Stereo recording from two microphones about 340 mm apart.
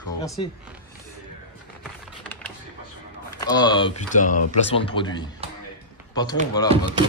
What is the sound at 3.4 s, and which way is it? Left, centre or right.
Speech, centre.